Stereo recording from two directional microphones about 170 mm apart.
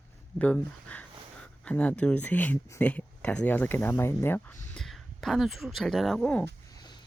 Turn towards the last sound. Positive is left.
turn(degrees=5)  # may be behind; listen again after turning